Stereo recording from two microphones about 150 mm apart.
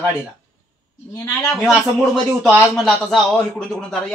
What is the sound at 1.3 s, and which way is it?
Speech, centre (ahead or behind).